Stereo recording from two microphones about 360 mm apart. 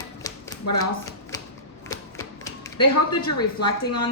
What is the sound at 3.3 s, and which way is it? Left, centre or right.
Speech, centre.